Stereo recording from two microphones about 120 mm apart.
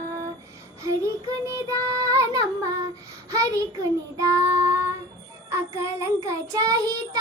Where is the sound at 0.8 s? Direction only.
25° right (ahead or behind).